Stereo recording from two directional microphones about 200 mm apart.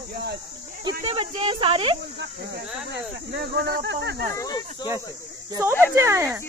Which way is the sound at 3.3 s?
60° right (ahead or behind).